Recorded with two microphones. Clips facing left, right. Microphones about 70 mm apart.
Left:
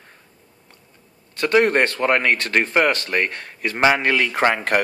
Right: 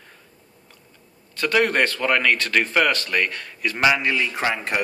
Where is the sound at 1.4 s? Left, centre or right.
Left.